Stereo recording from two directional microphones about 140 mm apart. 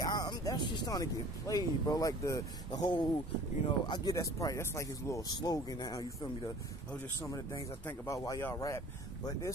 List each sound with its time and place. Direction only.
0.0 s speech: 30° left (ahead or behind)
7.8 s speech: 20° left (ahead or behind)